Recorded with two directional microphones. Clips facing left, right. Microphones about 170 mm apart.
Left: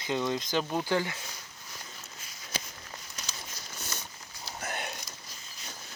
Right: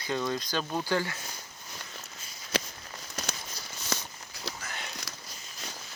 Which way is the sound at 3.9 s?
80° right.